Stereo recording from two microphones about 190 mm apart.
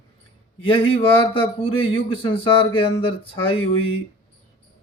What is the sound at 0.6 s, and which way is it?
A man's voice, 30° left (ahead or behind).